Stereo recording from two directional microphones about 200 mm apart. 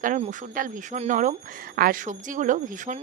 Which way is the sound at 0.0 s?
40° right (ahead or behind).